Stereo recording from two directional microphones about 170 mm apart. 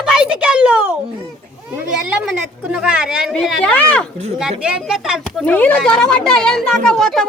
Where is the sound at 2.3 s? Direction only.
5° right (ahead or behind).